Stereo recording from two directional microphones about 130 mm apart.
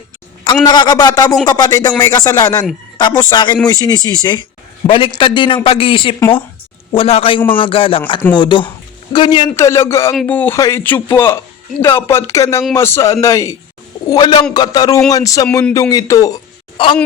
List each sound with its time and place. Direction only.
0.6 s a man's voice: 35° left (ahead or behind)
4.9 s a man's voice: 40° left (ahead or behind)
9.6 s speech: 20° left (ahead or behind)
14.1 s a man's voice: 35° left (ahead or behind)
16.8 s a man's voice: 40° left (ahead or behind)